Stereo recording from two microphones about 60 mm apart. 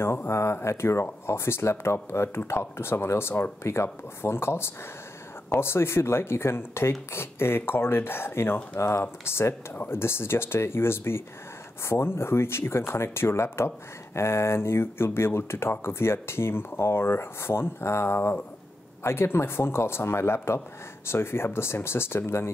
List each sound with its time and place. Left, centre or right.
0.0 s speech: left